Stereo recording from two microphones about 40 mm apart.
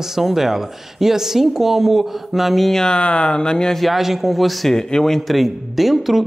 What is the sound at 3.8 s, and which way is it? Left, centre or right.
Speech, centre.